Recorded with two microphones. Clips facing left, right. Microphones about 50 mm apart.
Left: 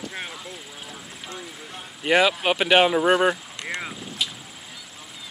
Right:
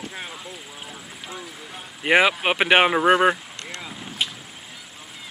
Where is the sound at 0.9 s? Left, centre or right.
Centre.